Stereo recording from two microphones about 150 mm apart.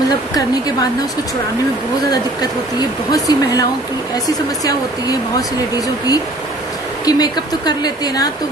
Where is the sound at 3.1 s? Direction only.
25° left (ahead or behind).